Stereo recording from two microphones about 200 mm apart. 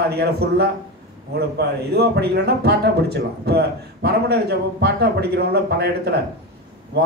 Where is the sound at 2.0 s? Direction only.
55° right (ahead or behind).